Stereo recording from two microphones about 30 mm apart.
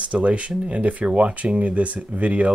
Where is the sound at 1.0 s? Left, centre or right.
Right.